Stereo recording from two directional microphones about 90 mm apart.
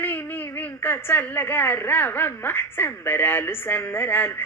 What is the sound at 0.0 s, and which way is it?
A woman's voice, 20° left (ahead or behind).